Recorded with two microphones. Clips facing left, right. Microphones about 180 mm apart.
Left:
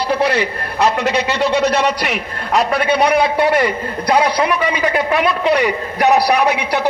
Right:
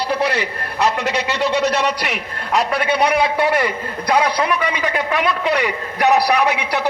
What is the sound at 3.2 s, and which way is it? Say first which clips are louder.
A man's voice: left 3 dB; 35° left (ahead or behind).